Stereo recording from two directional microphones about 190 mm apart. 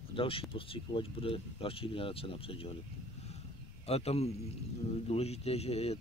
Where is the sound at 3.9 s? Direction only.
35° left (ahead or behind).